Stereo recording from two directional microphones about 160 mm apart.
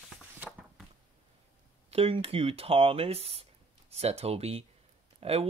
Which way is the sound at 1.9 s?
35° right (ahead or behind).